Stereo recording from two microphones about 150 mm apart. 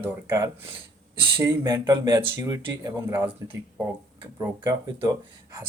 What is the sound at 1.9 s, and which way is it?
A man's voice, 25° right (ahead or behind).